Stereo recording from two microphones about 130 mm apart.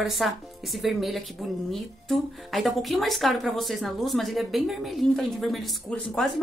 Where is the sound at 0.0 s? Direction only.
Centre (ahead or behind).